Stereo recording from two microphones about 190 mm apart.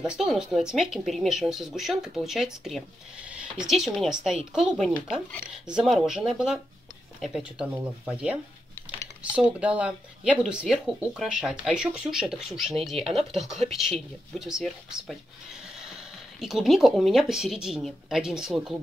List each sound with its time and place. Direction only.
0.0 s speech: 5° right (ahead or behind)
16.3 s speech: centre (ahead or behind)